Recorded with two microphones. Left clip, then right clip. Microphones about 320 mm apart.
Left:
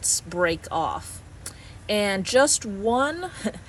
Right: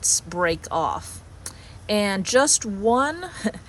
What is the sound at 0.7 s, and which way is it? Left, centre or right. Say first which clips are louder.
Speech: right 2 dB; right.